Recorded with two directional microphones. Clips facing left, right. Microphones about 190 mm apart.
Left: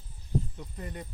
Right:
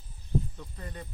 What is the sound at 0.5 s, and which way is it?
Speech, 15° left (ahead or behind).